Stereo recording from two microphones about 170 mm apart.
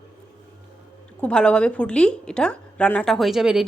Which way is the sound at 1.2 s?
5° left (ahead or behind).